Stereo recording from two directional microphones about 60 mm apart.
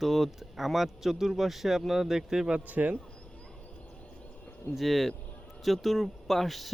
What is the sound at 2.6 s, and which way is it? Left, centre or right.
Speech, right.